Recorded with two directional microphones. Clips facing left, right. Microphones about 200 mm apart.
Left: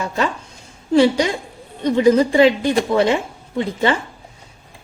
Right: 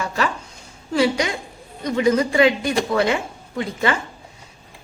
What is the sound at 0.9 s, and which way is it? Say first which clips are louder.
A woman's voice: left 5 dB; 30° left (ahead or behind).